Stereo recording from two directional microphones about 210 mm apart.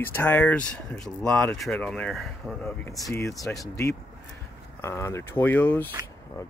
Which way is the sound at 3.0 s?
15° left (ahead or behind).